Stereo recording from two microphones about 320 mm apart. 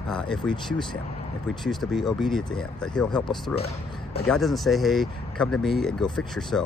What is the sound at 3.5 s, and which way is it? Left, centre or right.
Speech, centre.